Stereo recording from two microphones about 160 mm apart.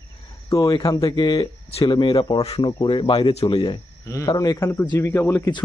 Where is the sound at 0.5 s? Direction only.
20° left (ahead or behind).